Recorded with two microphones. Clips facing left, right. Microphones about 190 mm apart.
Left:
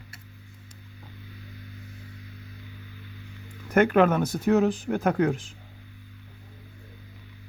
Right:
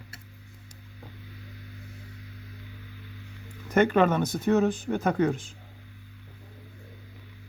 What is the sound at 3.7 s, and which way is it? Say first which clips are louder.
Speech: left 2 dB; 5° left (ahead or behind).